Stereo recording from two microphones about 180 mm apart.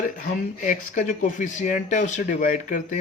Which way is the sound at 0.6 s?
45° left (ahead or behind).